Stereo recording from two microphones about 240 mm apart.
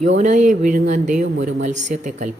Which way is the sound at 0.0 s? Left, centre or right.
Right.